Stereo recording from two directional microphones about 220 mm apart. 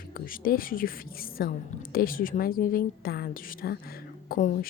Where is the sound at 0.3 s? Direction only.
40° left (ahead or behind).